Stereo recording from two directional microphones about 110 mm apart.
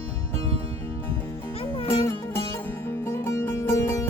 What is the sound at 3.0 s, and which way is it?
Music, 25° left (ahead or behind).